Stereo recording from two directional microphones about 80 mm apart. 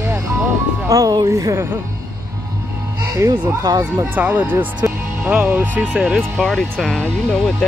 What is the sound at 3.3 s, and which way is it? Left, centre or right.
Speech, right.